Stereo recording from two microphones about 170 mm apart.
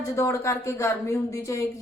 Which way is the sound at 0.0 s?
15° left (ahead or behind).